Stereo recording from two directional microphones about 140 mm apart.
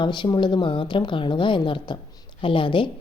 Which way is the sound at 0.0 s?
35° left (ahead or behind).